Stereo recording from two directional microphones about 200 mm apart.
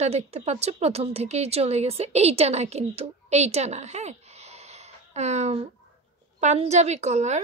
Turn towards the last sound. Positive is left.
turn(degrees=-35)  # may be behind; listen again after turning